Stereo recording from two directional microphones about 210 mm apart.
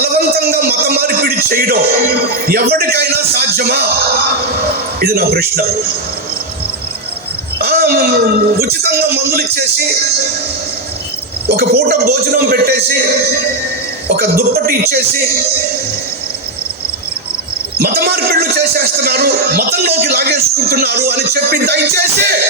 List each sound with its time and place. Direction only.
0.0 s music: 45° right (ahead or behind)
2.5 s a man's voice: 45° right (ahead or behind)
4.9 s a man's voice: 45° right (ahead or behind)
7.6 s a man's voice: 45° right (ahead or behind)
11.4 s a man's voice: 45° right (ahead or behind)
14.2 s a man's voice: 45° right (ahead or behind)
17.7 s a man's voice: 45° right (ahead or behind)